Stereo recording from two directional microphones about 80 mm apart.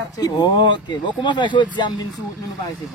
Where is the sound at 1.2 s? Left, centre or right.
Left.